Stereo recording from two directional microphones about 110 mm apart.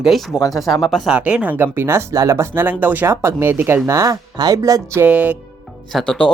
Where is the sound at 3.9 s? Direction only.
30° right (ahead or behind).